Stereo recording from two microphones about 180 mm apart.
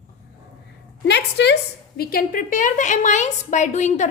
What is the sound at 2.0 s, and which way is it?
A woman's voice, 55° left (ahead or behind).